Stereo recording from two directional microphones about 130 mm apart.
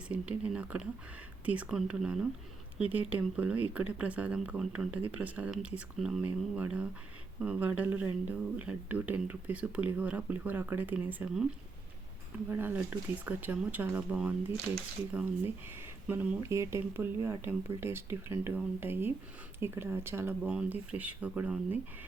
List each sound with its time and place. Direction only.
0.1 s speech: 10° right (ahead or behind)
12.5 s speech: 15° right (ahead or behind)